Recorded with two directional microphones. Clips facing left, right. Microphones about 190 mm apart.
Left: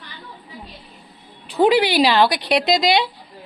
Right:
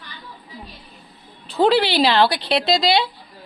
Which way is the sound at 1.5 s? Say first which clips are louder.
Left 1 dB; 15° left (ahead or behind).